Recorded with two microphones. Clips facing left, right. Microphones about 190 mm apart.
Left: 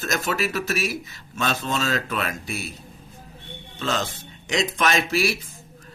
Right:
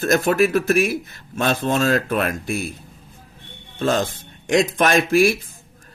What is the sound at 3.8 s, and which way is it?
Speech, 50° right (ahead or behind).